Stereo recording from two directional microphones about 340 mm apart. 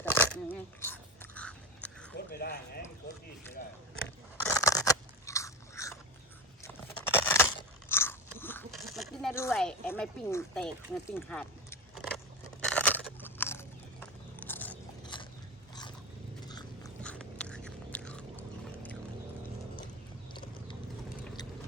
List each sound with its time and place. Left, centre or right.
0.0 s biting: centre
2.1 s a sound: left
4.4 s biting: centre
6.6 s a sound: centre
12.6 s biting: centre
16.5 s biting: centre